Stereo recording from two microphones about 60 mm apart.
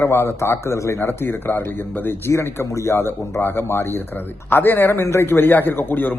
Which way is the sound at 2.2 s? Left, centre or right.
Left.